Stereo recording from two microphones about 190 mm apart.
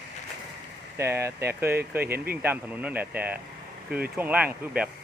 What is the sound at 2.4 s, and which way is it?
Speech, 10° right (ahead or behind).